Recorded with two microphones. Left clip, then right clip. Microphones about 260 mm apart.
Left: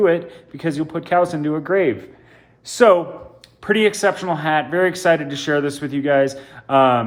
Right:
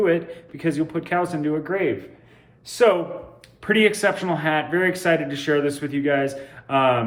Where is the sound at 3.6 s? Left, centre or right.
Centre.